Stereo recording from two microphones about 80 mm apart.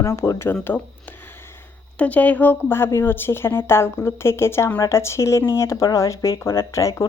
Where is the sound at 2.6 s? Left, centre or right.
Left.